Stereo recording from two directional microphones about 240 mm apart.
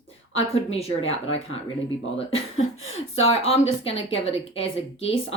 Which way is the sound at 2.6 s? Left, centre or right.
Left.